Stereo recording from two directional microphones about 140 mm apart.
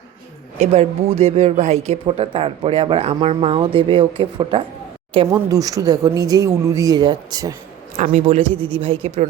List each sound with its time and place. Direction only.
0.6 s speech: 50° right (ahead or behind)
5.3 s speech: 25° right (ahead or behind)
7.9 s a man's voice: 55° right (ahead or behind)
8.6 s a woman's voice: 40° right (ahead or behind)